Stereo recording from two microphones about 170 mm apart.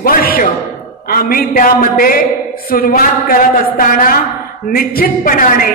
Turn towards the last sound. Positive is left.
turn(degrees=60)  # may be behind; listen again after turning